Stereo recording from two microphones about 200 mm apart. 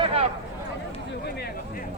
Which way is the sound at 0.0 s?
30° right (ahead or behind).